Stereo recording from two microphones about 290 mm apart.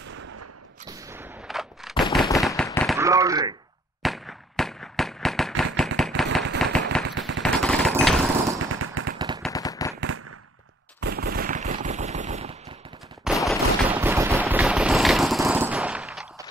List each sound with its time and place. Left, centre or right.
0.8 s gunshot: centre
2.4 s firecracker: centre
3.0 s a sound: centre
4.0 s fireworks: centre
5.6 s a sound: centre
6.6 s firecracker: centre
7.1 s machine gun: right
7.4 s machine gun: centre
7.9 s lawn mower: centre
8.6 s a sound: right
9.5 s machine gun: centre
9.9 s firecracker: right
11.0 s machine gun: right
13.5 s a sound: centre